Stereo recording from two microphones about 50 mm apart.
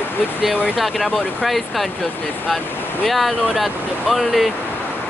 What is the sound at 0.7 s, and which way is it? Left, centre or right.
Speech, centre.